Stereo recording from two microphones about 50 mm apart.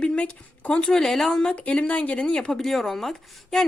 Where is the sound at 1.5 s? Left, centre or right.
Left.